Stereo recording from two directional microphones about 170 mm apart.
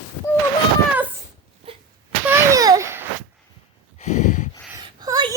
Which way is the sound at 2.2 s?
15° right (ahead or behind).